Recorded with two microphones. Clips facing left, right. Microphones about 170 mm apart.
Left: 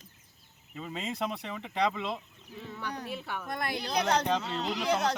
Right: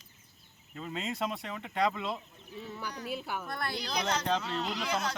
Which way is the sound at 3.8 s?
60° left (ahead or behind).